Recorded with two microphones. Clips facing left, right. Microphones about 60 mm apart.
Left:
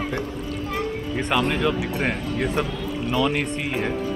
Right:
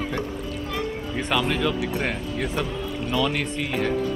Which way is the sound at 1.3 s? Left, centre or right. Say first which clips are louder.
Left 2 dB; centre.